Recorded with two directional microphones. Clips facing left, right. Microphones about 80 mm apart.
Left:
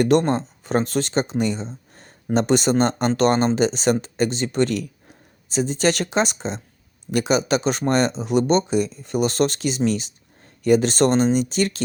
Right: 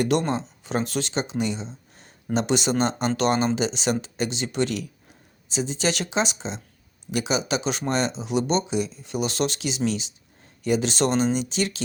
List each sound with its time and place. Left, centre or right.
0.0 s speech: left